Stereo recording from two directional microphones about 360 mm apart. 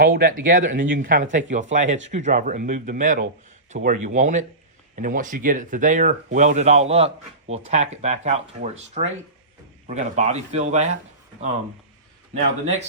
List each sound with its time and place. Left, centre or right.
0.0 s speech: right